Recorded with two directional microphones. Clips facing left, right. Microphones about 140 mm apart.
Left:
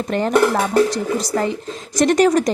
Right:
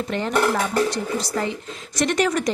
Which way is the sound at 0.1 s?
40° left (ahead or behind).